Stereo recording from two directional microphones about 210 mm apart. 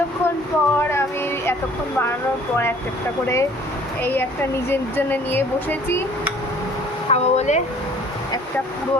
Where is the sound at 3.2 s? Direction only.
15° left (ahead or behind).